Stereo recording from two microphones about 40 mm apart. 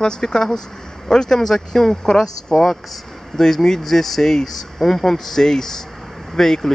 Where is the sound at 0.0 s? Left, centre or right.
Centre.